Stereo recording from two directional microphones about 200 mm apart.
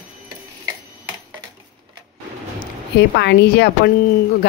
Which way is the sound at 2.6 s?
55° left (ahead or behind).